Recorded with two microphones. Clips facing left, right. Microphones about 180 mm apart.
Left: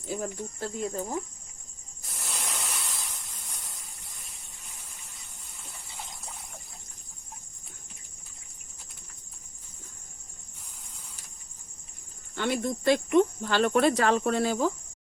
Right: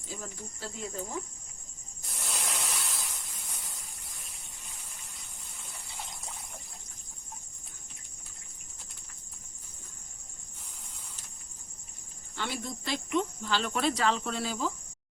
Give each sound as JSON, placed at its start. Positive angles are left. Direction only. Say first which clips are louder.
{"t": 0.1, "sound": "speech", "louder": "left 9 dB", "side_deg": 55}
{"t": 2.0, "sound": "a sound", "louder": "even", "side_deg": 0}
{"t": 5.9, "sound": "water", "louder": "even", "side_deg": 0}
{"t": 12.3, "sound": "speech", "louder": "left 8 dB", "side_deg": 55}